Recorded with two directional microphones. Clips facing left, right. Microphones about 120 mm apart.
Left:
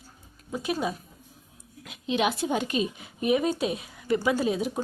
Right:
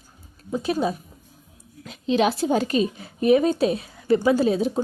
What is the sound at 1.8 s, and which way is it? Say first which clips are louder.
A woman's voice: right 5 dB; 35° right (ahead or behind).